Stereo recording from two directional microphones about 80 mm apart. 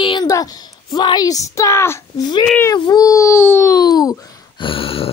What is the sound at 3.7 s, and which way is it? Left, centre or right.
Speech, left.